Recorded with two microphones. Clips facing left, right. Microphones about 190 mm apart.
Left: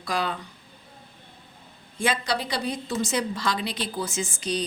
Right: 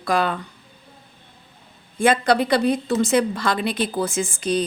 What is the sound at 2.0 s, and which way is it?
A woman's voice, 55° right (ahead or behind).